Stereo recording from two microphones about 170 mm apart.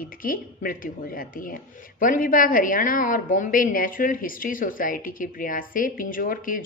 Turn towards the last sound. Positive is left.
turn(degrees=55)  # may be behind; listen again after turning